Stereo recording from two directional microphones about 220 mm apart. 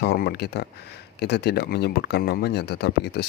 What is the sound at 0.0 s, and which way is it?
Speech, 45° left (ahead or behind).